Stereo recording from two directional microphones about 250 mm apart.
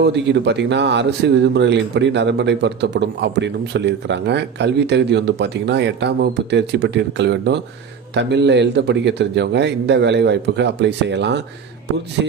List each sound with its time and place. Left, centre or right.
0.0 s a man's voice: right